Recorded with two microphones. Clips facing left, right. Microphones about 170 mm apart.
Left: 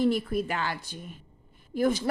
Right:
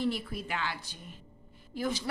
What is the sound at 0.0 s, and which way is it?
A woman's voice, 50° left (ahead or behind).